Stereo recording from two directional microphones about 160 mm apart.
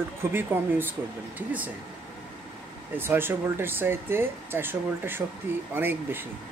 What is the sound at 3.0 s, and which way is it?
Speech, 15° right (ahead or behind).